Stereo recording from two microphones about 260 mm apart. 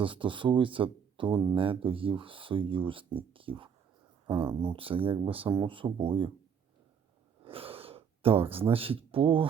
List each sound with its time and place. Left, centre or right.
0.0 s speech: centre
7.4 s speech: right